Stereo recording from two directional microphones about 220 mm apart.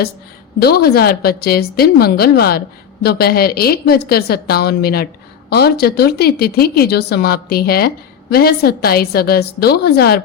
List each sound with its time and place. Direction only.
0.6 s speech: 45° left (ahead or behind)